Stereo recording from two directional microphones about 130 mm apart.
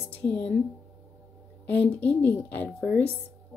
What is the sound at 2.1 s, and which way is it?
Speech, 15° left (ahead or behind).